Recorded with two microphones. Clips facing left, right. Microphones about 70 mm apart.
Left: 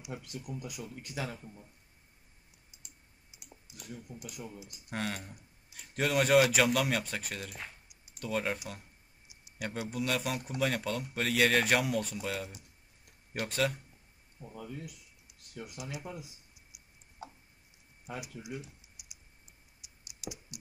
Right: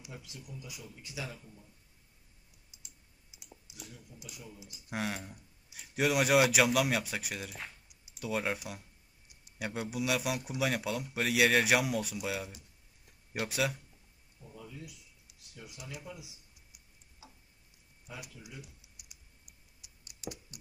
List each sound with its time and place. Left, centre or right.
0.1 s speech: left
3.9 s speech: left
4.8 s speech: centre
14.5 s speech: left
16.0 s speech: left
17.2 s tick: left
18.1 s speech: left
19.8 s computer keyboard: centre